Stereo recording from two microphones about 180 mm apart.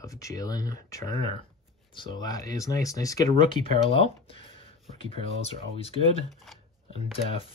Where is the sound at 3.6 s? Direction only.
30° left (ahead or behind).